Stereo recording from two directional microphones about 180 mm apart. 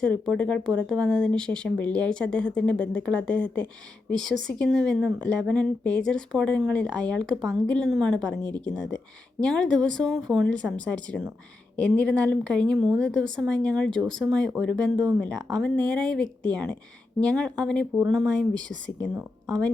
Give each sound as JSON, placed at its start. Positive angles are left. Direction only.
{"t": 0.0, "sound": "a woman's voice", "side_deg": 5}
{"t": 15.0, "sound": "speech", "side_deg": -20}
{"t": 15.5, "sound": "a woman's voice", "side_deg": 5}